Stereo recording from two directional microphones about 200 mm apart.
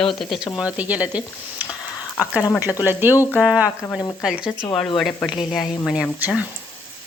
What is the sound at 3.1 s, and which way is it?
Frying, 15° left (ahead or behind).